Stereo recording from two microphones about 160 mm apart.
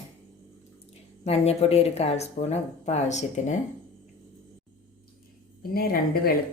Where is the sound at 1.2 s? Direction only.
40° left (ahead or behind).